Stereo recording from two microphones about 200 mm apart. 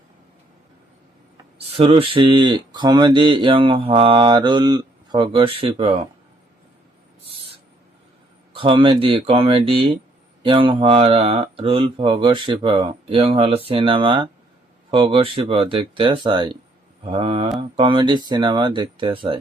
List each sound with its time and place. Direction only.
1.4 s speech: 30° right (ahead or behind)
8.5 s speech: 25° right (ahead or behind)